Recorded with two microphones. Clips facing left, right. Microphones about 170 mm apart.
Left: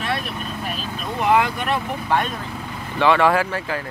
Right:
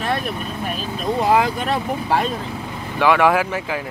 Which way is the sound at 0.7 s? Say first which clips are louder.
Right 8 dB; 35° right (ahead or behind).